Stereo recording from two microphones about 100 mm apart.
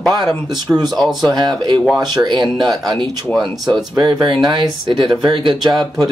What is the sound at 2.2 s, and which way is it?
Speech, 50° right (ahead or behind).